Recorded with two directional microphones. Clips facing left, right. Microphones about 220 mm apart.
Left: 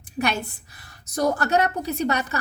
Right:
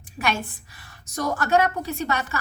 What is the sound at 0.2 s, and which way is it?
A woman's voice, 40° left (ahead or behind).